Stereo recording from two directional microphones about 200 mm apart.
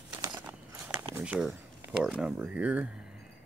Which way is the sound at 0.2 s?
20° right (ahead or behind).